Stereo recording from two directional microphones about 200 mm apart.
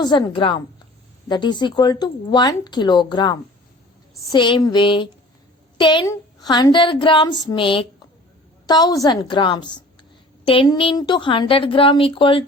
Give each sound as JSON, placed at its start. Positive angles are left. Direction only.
{"t": 0.0, "sound": "a woman's voice", "side_deg": 20}